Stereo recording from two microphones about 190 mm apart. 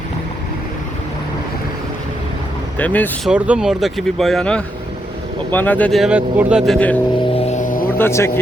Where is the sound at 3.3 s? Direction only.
5° right (ahead or behind).